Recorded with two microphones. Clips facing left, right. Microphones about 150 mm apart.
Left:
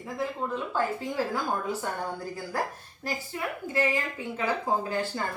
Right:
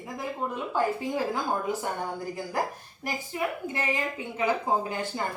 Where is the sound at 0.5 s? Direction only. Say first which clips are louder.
Right 3 dB; 15° right (ahead or behind).